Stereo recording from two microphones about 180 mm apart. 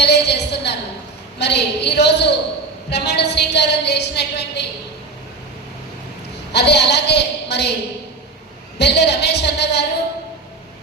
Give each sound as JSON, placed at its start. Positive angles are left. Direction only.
{"t": 0.0, "sound": "a sound", "side_deg": 70}
{"t": 1.4, "sound": "a woman's voice", "side_deg": 70}
{"t": 6.5, "sound": "a woman's voice", "side_deg": 70}
{"t": 8.8, "sound": "a woman's voice", "side_deg": 70}